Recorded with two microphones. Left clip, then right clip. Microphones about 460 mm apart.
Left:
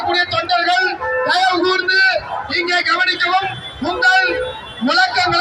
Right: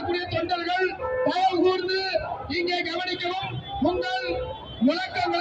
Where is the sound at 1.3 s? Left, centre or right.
Right.